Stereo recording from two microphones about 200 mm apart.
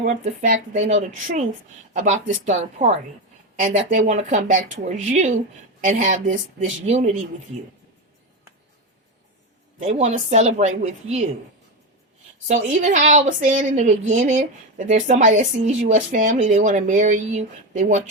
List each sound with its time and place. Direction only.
0.0 s speech: 40° right (ahead or behind)
9.8 s speech: 35° right (ahead or behind)
12.5 s speech: 35° right (ahead or behind)